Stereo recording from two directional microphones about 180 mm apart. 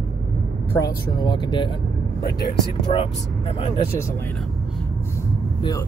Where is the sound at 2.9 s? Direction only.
30° left (ahead or behind).